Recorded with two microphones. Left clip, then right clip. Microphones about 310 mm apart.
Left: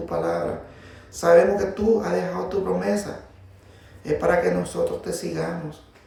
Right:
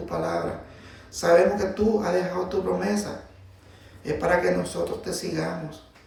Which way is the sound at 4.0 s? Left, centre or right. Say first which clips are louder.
Left 2 dB; centre.